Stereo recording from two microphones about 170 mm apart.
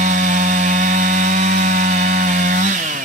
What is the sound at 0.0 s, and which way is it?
Chainsaw, 50° right (ahead or behind).